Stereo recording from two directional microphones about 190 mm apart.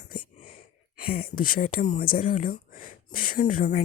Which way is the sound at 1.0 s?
50° left (ahead or behind).